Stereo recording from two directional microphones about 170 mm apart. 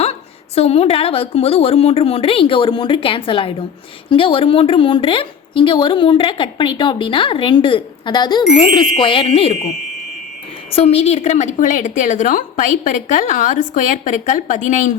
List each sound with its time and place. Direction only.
0.0 s a woman's voice: 35° left (ahead or behind)
10.7 s a woman's voice: 35° left (ahead or behind)